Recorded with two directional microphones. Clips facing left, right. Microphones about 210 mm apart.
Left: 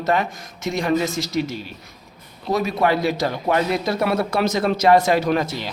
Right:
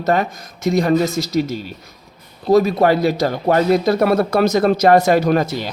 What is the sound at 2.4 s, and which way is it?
Mantra, 35° right (ahead or behind).